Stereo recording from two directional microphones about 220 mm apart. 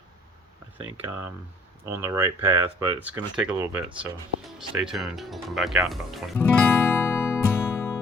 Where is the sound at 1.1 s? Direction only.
10° right (ahead or behind); by 8.0 s 10° left (ahead or behind).